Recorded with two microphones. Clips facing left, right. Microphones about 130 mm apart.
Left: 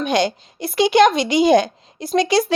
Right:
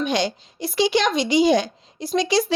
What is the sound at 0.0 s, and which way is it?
A woman's voice, 55° left (ahead or behind).